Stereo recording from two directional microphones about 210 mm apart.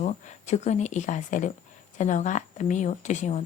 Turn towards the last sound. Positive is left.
turn(degrees=35)  # may be behind; listen again after turning